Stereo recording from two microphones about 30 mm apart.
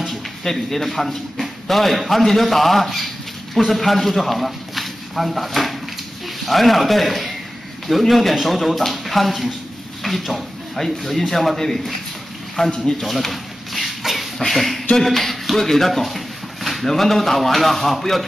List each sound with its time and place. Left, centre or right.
0.7 s a man's voice: centre
12.6 s speech: left
13.2 s a sound: centre
14.4 s a man's voice: centre